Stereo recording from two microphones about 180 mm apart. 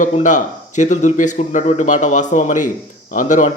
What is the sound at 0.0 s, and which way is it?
Speech, 45° left (ahead or behind).